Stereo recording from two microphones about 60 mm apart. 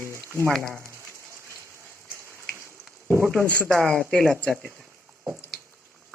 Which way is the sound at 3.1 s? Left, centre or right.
Right.